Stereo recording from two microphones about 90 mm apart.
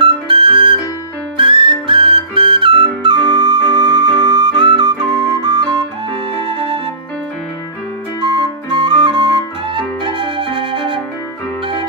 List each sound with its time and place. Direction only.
0.0 s flute: 65° right (ahead or behind)
1.3 s whistle: 70° right (ahead or behind); by 5.8 s 50° right (ahead or behind)
6.4 s music: 80° right
8.3 s flute: 55° right (ahead or behind)
10.0 s music: 65° right (ahead or behind)